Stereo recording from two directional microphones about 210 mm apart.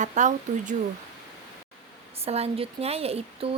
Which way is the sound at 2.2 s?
30° right (ahead or behind).